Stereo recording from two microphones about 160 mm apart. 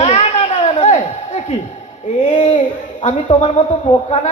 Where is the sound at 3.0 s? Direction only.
40° left (ahead or behind).